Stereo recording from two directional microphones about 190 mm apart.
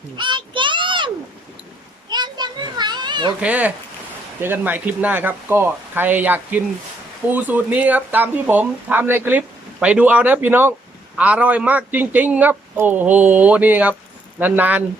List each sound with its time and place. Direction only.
0.2 s a sound: 25° right (ahead or behind)
2.0 s children playing: 20° right (ahead or behind)
3.4 s a man's voice: 5° right (ahead or behind)